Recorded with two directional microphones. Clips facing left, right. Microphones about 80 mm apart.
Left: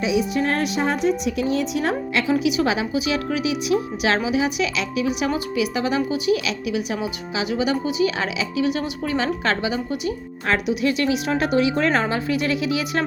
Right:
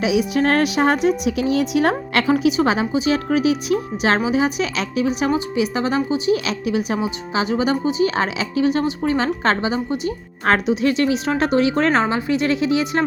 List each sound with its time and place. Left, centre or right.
0.0 s a woman's voice: right
2.4 s a woman's voice: right